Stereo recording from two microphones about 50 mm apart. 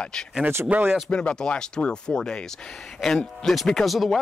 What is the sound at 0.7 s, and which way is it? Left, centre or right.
Speech, right.